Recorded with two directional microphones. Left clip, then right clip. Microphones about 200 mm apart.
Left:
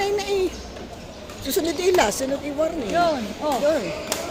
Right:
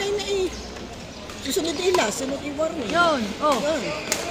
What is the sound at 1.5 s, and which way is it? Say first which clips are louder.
Speech: left 2 dB; 20° left (ahead or behind).